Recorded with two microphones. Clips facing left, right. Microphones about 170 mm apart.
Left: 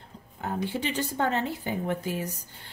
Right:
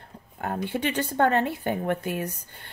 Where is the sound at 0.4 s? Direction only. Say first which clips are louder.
Right 2 dB; 60° right (ahead or behind).